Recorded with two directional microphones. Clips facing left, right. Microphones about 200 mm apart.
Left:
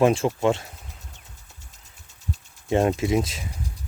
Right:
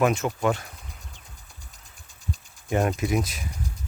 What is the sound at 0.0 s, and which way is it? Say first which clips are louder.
Speech: left 3 dB; 30° left (ahead or behind).